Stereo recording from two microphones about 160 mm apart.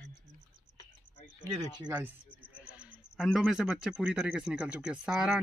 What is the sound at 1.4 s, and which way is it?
Speech, 25° right (ahead or behind).